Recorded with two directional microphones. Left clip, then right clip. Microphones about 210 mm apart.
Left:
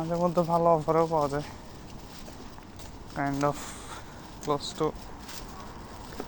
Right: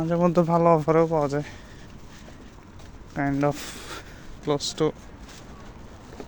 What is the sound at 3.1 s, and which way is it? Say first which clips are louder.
Speech: right 3 dB; 55° right (ahead or behind).